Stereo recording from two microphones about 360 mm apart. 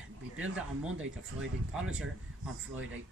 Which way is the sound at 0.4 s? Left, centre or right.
Right.